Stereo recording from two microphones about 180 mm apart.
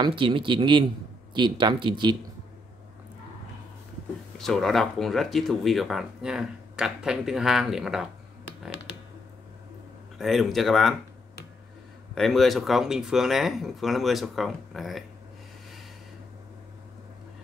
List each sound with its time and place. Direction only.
0.0 s speech: 30° right (ahead or behind)
4.4 s speech: centre (ahead or behind)
10.1 s speech: centre (ahead or behind)
12.2 s speech: centre (ahead or behind)